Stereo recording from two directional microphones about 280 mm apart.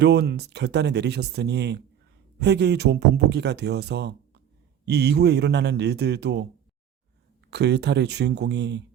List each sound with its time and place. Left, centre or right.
0.0 s speech: right
7.5 s speech: right